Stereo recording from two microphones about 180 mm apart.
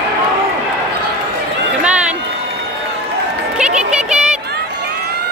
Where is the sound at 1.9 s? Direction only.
5° right (ahead or behind).